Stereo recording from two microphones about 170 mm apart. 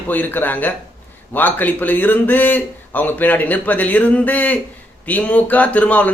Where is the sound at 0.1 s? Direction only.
10° left (ahead or behind).